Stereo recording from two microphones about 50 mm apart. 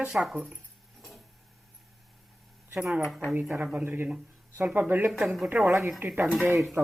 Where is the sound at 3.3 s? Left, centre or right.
Right.